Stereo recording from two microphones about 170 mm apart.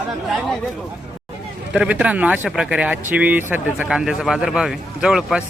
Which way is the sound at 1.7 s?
5° right (ahead or behind).